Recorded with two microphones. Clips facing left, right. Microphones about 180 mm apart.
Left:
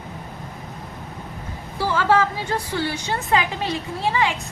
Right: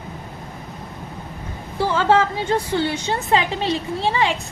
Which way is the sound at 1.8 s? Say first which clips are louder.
Right 2 dB; 25° right (ahead or behind).